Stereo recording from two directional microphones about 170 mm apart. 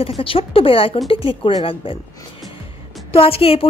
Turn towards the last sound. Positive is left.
turn(degrees=35)  # may be behind; listen again after turning